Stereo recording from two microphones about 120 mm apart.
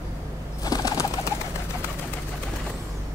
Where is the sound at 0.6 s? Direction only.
30° left (ahead or behind).